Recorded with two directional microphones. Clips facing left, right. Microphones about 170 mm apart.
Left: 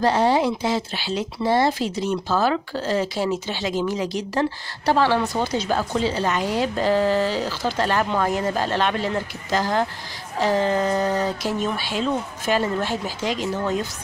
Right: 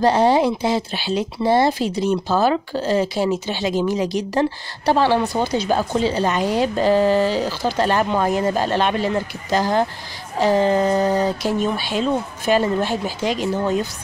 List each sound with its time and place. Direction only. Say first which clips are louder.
0.0 s speech: right 3 dB; 20° right (ahead or behind)
6.1 s speech: right 3 dB; 30° right (ahead or behind)
6.5 s speech: right 4 dB; 15° right (ahead or behind)
8.6 s speech: right 3 dB; 15° right (ahead or behind)